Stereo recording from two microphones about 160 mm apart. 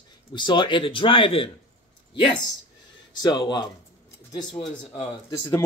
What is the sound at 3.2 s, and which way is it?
Speech, 25° left (ahead or behind).